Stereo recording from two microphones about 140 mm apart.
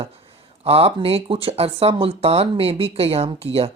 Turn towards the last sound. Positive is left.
turn(degrees=-45)  # may be behind; listen again after turning